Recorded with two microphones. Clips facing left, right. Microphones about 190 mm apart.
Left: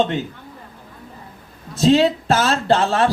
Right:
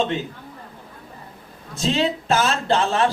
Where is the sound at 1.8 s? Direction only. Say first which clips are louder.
Left 7 dB; 35° left (ahead or behind).